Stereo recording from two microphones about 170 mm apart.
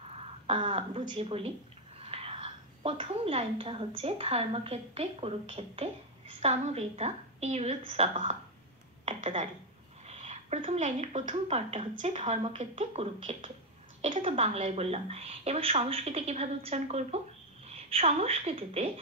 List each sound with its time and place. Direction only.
0.5 s a woman's voice: 35° right (ahead or behind)